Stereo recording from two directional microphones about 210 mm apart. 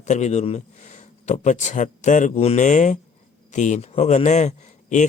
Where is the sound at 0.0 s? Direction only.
35° left (ahead or behind).